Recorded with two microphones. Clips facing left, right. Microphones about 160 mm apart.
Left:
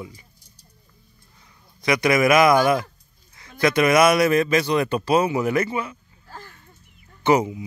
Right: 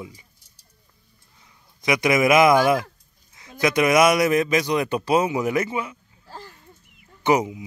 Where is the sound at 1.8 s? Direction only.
20° right (ahead or behind).